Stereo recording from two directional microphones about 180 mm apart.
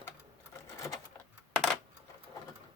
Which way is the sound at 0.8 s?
15° left (ahead or behind).